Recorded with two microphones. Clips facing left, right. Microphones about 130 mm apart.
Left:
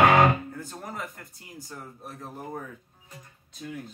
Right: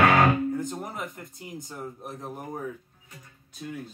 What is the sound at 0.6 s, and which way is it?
Music, 20° right (ahead or behind).